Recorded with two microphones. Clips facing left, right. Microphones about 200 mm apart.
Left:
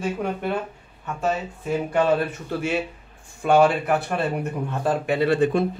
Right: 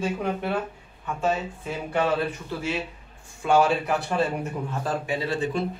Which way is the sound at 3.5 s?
60° left (ahead or behind).